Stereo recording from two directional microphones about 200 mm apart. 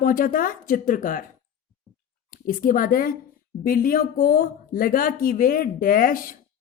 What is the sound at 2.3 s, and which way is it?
Speech, 45° left (ahead or behind).